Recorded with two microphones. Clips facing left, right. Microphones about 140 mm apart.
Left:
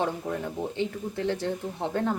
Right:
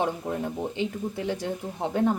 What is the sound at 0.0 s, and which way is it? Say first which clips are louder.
Speech: right 1 dB; 15° right (ahead or behind).